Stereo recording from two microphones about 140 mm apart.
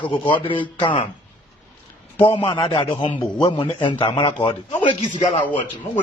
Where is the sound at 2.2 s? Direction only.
35° left (ahead or behind).